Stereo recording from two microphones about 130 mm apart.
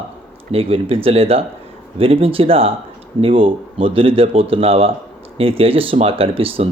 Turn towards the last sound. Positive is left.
turn(degrees=-45)  # may be behind; listen again after turning